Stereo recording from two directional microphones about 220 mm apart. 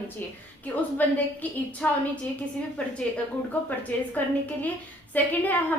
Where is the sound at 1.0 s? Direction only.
10° left (ahead or behind).